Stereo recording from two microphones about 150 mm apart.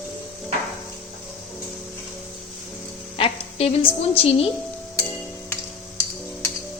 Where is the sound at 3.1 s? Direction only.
40° left (ahead or behind).